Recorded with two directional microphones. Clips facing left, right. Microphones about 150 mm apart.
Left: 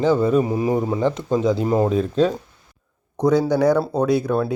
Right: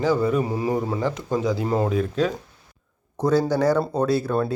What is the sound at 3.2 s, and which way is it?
Speech, 15° left (ahead or behind).